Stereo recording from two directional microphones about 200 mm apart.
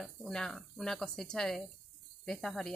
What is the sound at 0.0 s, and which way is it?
A woman's voice, centre (ahead or behind).